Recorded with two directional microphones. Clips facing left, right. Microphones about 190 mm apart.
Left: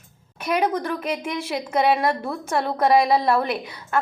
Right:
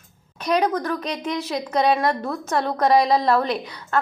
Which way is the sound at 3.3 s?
10° left (ahead or behind).